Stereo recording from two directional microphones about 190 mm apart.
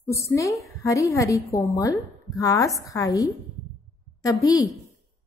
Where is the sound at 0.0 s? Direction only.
15° left (ahead or behind).